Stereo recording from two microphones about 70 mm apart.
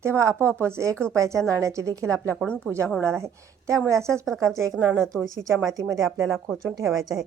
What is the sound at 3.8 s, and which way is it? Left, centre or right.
Speech, right.